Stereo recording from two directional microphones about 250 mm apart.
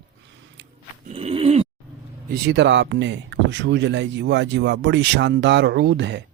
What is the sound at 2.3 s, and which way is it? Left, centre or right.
Speech, right.